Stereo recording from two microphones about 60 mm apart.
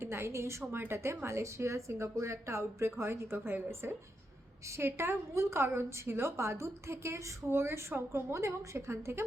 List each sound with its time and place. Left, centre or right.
0.0 s a woman's voice: right
0.6 s a woman's voice: right